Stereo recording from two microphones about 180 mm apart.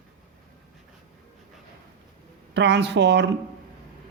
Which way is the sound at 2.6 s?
75° right (ahead or behind).